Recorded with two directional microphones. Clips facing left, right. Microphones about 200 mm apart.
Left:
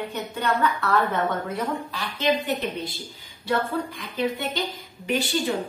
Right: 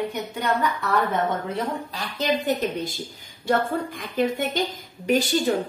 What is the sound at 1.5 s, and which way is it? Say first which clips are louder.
A woman's voice: even; 40° right (ahead or behind).